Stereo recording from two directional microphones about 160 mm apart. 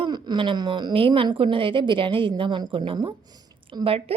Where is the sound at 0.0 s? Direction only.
30° right (ahead or behind).